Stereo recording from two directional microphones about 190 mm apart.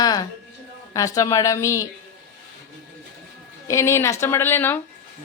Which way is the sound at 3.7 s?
15° left (ahead or behind).